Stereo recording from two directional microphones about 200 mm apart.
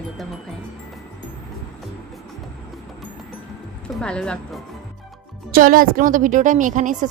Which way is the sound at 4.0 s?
5° left (ahead or behind).